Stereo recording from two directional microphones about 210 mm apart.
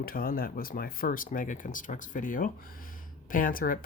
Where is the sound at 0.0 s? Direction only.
45° left (ahead or behind).